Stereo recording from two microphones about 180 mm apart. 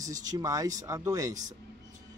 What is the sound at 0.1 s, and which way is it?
Speech, 20° right (ahead or behind).